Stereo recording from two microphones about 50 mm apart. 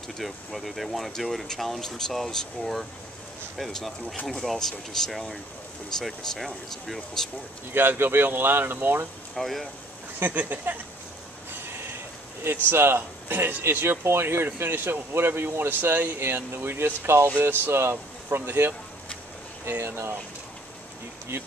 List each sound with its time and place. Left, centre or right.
0.2 s speech: centre
7.7 s speech: right
9.3 s speech: centre
10.1 s speech: right
12.7 s speech: right
19.8 s speech: right